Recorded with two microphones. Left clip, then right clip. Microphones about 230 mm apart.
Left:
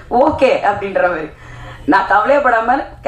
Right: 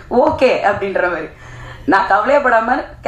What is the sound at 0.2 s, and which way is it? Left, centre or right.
Speech, right.